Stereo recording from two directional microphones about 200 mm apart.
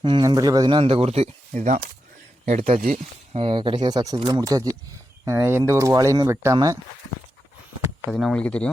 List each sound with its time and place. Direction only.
0.0 s speech: 25° right (ahead or behind)
3.4 s speech: 25° right (ahead or behind)
8.1 s speech: centre (ahead or behind)